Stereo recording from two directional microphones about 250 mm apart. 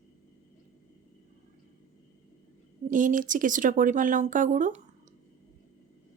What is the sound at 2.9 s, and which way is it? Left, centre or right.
Speech, right.